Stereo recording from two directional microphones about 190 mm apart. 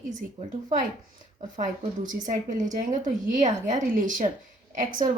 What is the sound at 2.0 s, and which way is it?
A woman's voice, 40° right (ahead or behind).